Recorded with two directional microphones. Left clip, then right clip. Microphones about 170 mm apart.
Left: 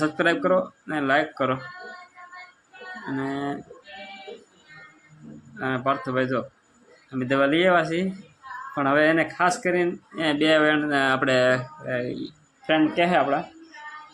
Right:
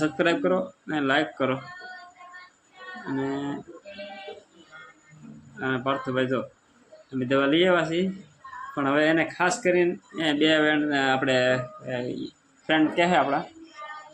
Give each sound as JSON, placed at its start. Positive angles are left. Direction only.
{"t": 0.0, "sound": "speech", "side_deg": 20}
{"t": 3.2, "sound": "speech", "side_deg": 20}
{"t": 5.5, "sound": "speech", "side_deg": 25}